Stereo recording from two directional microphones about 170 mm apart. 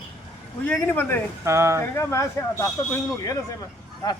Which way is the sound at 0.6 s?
10° left (ahead or behind).